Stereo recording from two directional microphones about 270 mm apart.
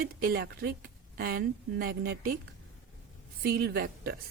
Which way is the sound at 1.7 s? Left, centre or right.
Right.